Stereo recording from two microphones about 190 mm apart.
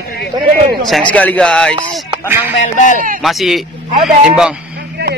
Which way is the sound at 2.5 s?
40° left (ahead or behind).